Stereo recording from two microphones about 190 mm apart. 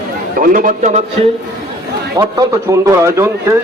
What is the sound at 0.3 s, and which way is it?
Speech, 45° right (ahead or behind).